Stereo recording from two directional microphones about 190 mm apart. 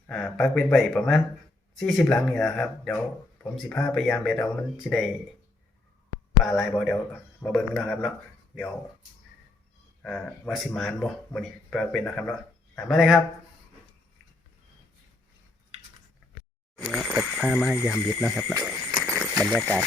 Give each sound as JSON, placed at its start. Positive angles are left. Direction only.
{"t": 0.1, "sound": "a man's voice", "side_deg": 5}
{"t": 6.4, "sound": "a man's voice", "side_deg": 0}
{"t": 10.0, "sound": "a man's voice", "side_deg": 5}
{"t": 16.9, "sound": "a man's voice", "side_deg": 0}
{"t": 18.6, "sound": "a sound", "side_deg": -5}